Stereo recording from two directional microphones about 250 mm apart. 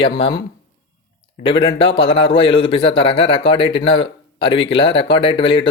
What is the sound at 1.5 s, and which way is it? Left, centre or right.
Speech, left.